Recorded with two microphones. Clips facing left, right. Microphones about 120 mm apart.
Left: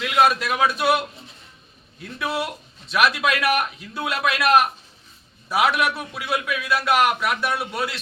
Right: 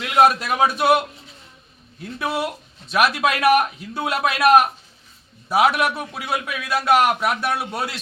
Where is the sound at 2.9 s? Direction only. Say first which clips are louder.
Right 1 dB; 40° right (ahead or behind).